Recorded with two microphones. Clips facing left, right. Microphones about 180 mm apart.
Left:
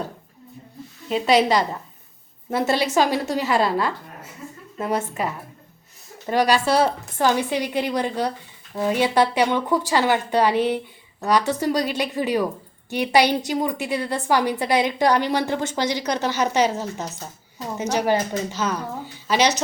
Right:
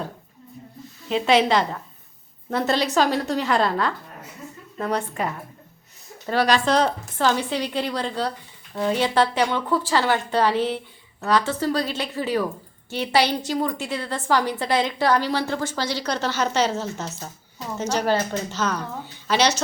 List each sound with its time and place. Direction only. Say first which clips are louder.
1.0 s a woman's voice: even; centre (ahead or behind)
2.5 s a woman's voice: left 1 dB; 10° left (ahead or behind)
6.2 s a woman's voice: left 1 dB; 15° left (ahead or behind)